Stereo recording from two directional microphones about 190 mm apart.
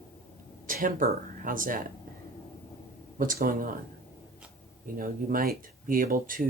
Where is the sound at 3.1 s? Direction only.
45° right (ahead or behind).